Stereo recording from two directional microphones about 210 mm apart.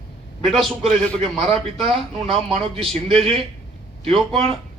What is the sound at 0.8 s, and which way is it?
A man's voice, 30° right (ahead or behind).